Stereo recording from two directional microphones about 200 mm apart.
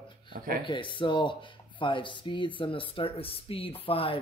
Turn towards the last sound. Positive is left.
turn(degrees=25)  # may be behind; listen again after turning